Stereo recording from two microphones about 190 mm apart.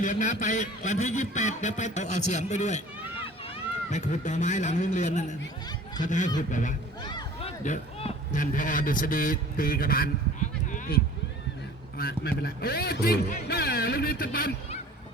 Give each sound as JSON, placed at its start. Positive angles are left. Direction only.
{"t": 0.0, "sound": "a man's voice", "side_deg": 45}
{"t": 3.8, "sound": "a man's voice", "side_deg": 40}
{"t": 7.0, "sound": "a sound", "side_deg": 25}
{"t": 7.6, "sound": "speech", "side_deg": 40}
{"t": 10.7, "sound": "a sound", "side_deg": 45}
{"t": 11.9, "sound": "a man's voice", "side_deg": 55}